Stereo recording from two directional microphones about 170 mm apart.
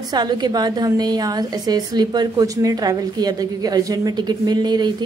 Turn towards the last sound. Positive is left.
turn(degrees=-25)  # may be behind; listen again after turning